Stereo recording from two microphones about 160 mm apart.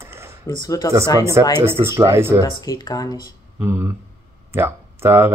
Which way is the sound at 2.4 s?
25° left (ahead or behind).